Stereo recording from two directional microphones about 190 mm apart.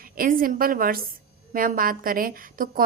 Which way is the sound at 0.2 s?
50° right (ahead or behind).